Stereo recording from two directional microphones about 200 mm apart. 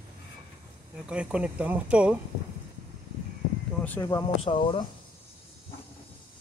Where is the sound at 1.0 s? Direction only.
5° right (ahead or behind).